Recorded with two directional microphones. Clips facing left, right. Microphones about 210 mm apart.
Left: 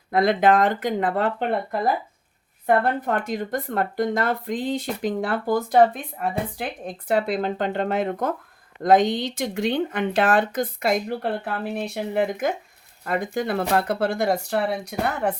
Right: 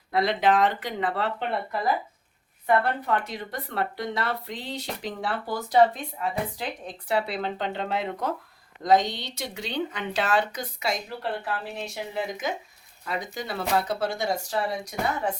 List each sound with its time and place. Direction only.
0.1 s speech: 50° left (ahead or behind)